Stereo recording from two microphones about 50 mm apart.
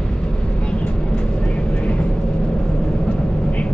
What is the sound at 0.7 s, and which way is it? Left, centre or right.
Vehicle, left.